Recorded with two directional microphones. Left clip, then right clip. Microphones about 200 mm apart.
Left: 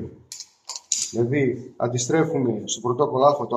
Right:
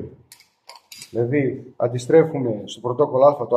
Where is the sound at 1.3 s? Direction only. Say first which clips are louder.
Right 1 dB; 40° right (ahead or behind).